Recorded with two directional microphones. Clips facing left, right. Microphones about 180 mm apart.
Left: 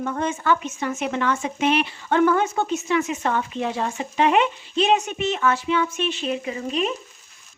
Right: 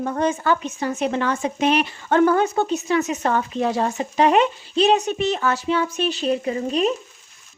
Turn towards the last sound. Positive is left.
turn(degrees=-40)  # may be behind; listen again after turning